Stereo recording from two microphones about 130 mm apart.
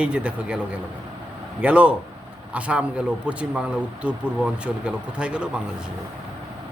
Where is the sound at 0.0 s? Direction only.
10° right (ahead or behind).